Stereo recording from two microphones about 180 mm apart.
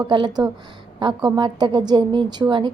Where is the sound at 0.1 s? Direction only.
25° right (ahead or behind).